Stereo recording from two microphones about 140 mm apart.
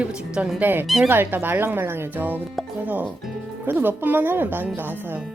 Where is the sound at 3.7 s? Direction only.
15° right (ahead or behind).